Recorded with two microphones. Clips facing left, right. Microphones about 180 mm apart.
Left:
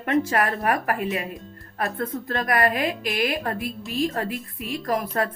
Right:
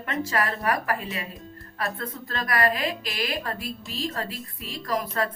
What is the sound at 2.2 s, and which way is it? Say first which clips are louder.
A woman's voice: left 2 dB; 50° left (ahead or behind).